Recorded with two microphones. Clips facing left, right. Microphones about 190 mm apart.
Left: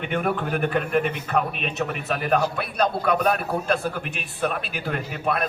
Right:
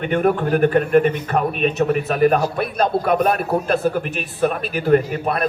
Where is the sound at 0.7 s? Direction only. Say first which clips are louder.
Right 8 dB; 45° right (ahead or behind).